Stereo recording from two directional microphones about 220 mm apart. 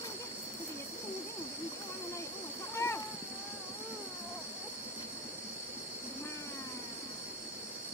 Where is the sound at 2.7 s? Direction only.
15° left (ahead or behind).